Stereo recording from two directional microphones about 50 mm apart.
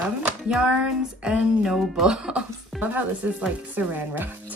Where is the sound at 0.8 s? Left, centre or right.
Right.